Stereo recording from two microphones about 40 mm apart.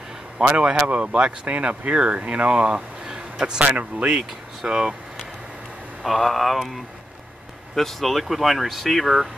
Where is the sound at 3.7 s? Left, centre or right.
Right.